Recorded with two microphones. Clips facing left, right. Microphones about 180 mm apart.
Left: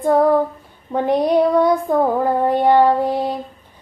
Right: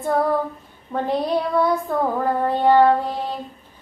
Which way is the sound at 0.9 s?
15° left (ahead or behind).